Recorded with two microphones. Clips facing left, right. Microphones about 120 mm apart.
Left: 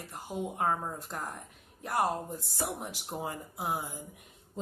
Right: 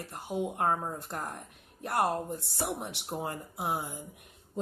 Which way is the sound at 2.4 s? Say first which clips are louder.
Right 1 dB; 60° right (ahead or behind).